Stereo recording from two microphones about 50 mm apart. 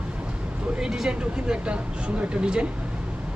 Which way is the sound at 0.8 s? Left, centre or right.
Centre.